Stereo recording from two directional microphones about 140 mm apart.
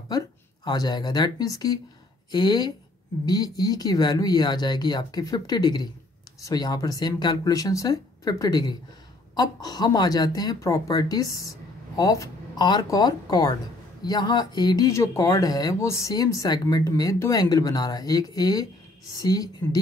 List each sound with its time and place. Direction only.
0.7 s speech: 30° left (ahead or behind)